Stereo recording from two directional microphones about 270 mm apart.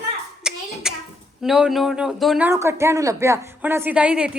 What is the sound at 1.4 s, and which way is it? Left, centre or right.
A woman's voice, centre.